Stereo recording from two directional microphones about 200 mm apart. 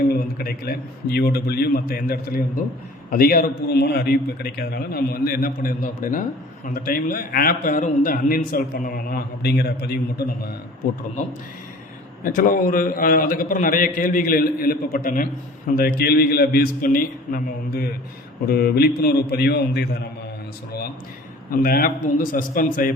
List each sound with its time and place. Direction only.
0.1 s a man's voice: 50° left (ahead or behind)
12.2 s a man's voice: 45° left (ahead or behind)
21.5 s a man's voice: 45° left (ahead or behind)